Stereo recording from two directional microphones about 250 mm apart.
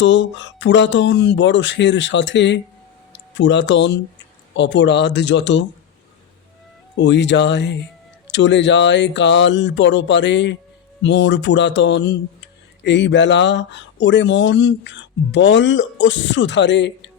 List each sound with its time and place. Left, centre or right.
0.0 s speech: left
7.0 s speech: left